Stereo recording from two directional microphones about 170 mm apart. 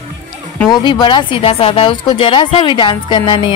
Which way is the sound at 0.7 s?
25° left (ahead or behind).